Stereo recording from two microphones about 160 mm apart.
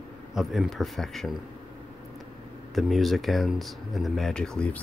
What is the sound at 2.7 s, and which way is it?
Speech, centre (ahead or behind).